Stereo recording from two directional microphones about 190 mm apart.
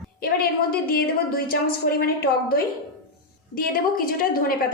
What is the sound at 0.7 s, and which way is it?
A woman's voice, 50° left (ahead or behind).